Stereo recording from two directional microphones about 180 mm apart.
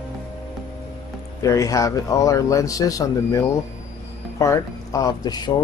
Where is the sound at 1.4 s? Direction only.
15° left (ahead or behind).